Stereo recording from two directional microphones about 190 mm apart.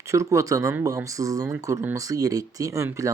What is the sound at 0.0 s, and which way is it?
Speech, 15° right (ahead or behind).